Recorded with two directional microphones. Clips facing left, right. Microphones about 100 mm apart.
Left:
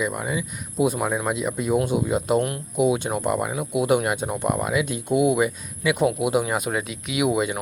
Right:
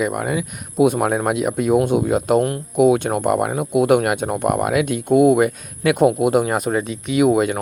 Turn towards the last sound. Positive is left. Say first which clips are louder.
# right 7 dB
turn(degrees=-50)  # may be behind; listen again after turning